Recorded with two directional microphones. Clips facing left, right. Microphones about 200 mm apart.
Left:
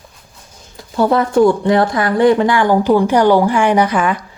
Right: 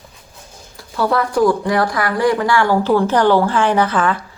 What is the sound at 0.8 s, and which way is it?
A woman's voice, 20° left (ahead or behind).